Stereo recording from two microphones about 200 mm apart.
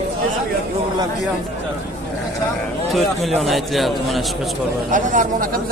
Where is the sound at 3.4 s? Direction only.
Centre (ahead or behind).